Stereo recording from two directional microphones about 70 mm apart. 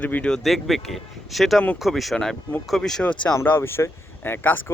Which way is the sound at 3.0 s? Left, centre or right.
Centre.